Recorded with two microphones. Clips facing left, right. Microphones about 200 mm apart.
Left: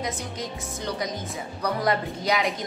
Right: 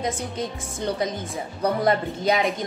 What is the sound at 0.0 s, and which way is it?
Speech, 25° right (ahead or behind).